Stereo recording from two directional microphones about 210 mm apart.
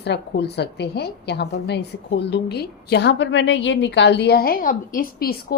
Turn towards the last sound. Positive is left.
turn(degrees=45)  # may be behind; listen again after turning